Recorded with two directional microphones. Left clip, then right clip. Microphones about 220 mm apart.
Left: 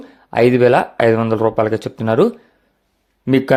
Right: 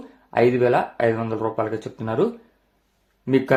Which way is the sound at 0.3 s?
40° left (ahead or behind).